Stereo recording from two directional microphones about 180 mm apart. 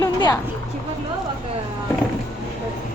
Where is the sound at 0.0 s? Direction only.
20° left (ahead or behind).